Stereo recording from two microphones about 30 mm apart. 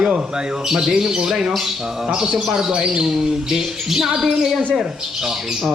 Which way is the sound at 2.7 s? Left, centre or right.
Right.